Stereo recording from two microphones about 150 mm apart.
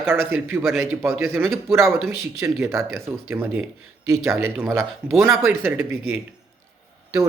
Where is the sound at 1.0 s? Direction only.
15° right (ahead or behind).